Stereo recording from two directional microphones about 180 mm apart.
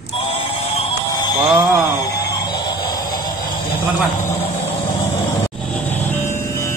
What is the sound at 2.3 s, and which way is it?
Music, 25° left (ahead or behind).